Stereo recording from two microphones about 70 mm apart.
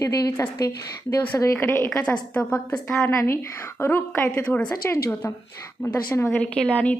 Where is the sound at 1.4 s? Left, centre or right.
Left.